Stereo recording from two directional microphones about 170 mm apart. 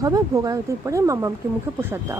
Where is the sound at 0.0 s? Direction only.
20° right (ahead or behind).